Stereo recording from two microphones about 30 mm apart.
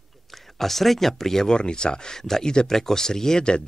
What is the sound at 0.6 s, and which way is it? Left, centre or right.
Speech, centre.